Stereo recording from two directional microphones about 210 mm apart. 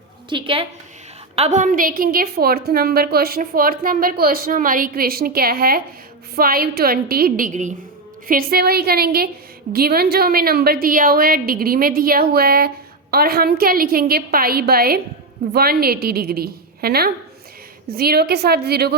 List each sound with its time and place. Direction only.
0.3 s a woman's voice: 25° right (ahead or behind)
1.4 s a woman's voice: 35° right (ahead or behind)